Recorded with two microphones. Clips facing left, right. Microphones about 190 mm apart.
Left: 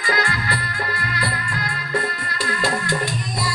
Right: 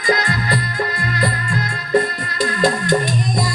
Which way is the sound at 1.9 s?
20° right (ahead or behind).